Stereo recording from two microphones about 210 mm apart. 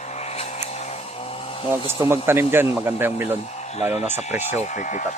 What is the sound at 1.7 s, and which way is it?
Speech, 10° right (ahead or behind).